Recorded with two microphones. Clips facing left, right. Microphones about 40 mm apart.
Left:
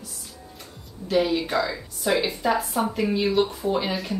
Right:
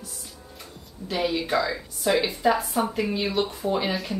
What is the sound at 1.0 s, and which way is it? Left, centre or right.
A woman's voice, centre.